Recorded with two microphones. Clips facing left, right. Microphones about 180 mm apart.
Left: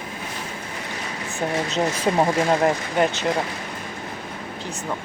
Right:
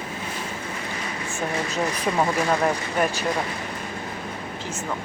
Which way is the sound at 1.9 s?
25° left (ahead or behind).